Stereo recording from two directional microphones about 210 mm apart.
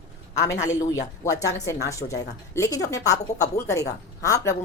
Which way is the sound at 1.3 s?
15° left (ahead or behind).